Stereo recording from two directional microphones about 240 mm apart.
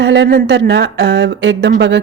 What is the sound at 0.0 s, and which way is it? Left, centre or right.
A woman's voice, right.